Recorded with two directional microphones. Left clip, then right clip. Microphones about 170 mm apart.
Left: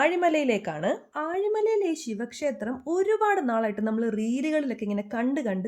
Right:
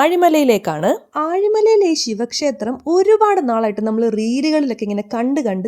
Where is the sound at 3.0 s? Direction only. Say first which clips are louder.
Right 10 dB; 45° right (ahead or behind).